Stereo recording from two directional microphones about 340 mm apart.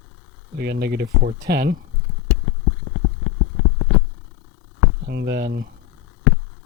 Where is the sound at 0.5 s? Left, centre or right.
Right.